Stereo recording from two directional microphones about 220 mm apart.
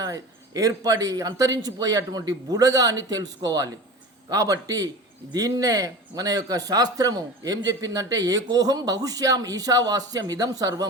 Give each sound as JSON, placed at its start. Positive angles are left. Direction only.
{"t": 0.0, "sound": "a man's voice", "side_deg": -15}